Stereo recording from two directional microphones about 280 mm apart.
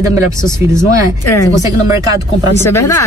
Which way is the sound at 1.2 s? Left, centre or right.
Centre.